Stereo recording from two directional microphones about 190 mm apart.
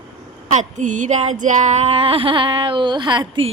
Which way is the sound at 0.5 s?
40° right (ahead or behind).